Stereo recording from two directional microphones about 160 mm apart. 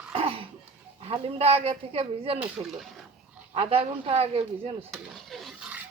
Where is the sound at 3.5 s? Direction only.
40° right (ahead or behind).